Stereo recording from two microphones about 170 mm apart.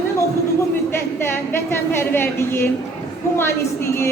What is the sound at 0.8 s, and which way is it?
A woman's voice, 15° left (ahead or behind).